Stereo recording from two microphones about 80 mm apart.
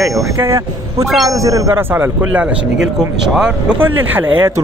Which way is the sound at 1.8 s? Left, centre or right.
Right.